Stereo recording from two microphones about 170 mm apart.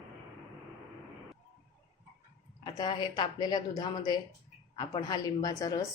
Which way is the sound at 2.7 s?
25° left (ahead or behind).